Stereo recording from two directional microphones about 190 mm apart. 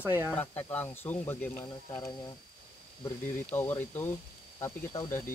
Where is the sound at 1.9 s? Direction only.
20° left (ahead or behind).